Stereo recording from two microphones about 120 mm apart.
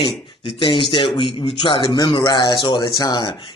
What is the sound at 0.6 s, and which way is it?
A man's voice, 45° left (ahead or behind).